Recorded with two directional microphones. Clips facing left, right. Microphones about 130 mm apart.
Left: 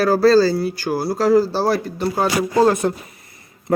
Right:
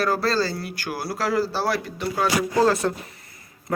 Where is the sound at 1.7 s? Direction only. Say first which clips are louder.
Left 6 dB; 35° left (ahead or behind).